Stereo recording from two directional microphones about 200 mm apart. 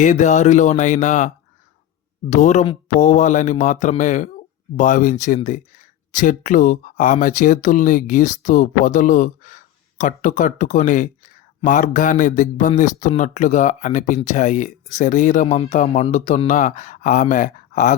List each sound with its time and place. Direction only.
0.0 s speech: 40° left (ahead or behind)
2.3 s speech: 35° left (ahead or behind)